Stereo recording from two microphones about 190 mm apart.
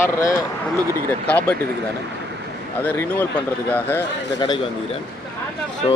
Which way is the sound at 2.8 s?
10° left (ahead or behind).